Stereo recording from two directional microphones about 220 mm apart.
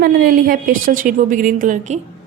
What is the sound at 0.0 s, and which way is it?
A woman's voice, 40° right (ahead or behind).